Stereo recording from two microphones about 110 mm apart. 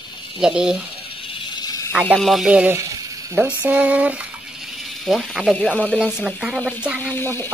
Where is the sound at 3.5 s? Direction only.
15° right (ahead or behind).